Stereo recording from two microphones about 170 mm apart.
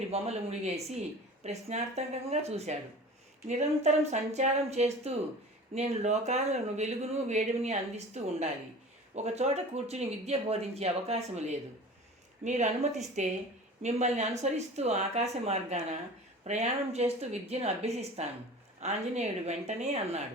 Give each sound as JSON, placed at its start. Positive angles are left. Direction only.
{"t": 0.1, "sound": "a woman's voice", "side_deg": -40}